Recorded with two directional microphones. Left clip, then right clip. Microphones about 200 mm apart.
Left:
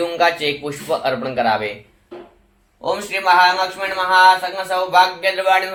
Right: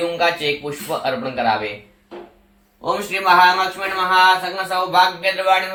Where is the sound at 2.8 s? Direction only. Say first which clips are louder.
Even; 45° left (ahead or behind).